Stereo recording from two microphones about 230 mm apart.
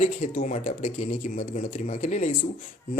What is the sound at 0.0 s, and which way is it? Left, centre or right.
Speech, left.